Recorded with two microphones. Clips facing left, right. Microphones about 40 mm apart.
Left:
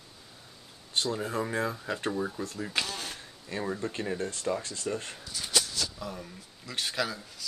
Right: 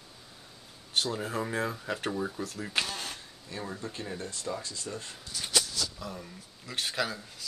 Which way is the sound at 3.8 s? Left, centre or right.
Left.